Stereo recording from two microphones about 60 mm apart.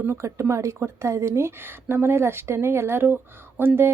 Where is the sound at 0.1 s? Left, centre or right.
Right.